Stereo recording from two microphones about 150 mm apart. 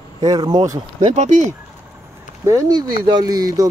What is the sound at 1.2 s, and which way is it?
Speech, 50° right (ahead or behind).